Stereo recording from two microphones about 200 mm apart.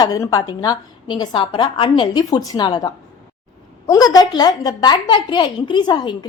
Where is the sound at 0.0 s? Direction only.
20° left (ahead or behind).